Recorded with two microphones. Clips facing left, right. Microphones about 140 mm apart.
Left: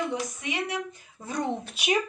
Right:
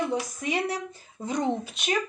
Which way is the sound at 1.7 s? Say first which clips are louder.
Left 2 dB; 10° left (ahead or behind).